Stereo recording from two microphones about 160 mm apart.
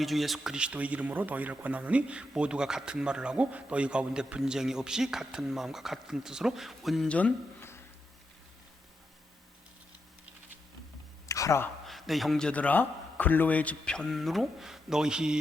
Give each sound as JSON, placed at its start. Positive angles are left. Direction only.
{"t": 0.0, "sound": "speech", "side_deg": 0}
{"t": 11.3, "sound": "a sound", "side_deg": 20}
{"t": 11.9, "sound": "speech", "side_deg": 0}